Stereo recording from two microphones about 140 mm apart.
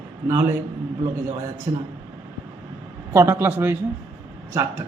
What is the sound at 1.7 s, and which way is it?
Speech, 25° right (ahead or behind).